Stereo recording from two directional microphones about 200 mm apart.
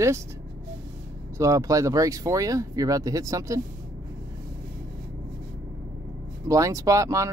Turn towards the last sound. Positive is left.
turn(degrees=-15)  # may be behind; listen again after turning